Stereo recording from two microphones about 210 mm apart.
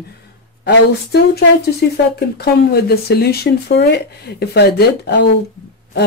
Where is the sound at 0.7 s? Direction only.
50° left (ahead or behind).